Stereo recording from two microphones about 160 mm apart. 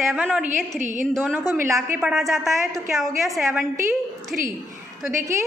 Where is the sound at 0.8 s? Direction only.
50° right (ahead or behind).